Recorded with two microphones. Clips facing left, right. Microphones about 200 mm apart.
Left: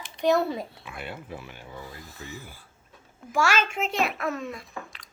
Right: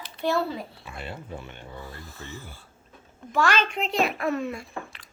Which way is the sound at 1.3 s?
5° left (ahead or behind).